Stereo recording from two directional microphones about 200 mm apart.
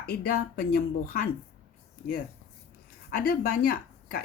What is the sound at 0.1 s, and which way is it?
Speech, 50° left (ahead or behind).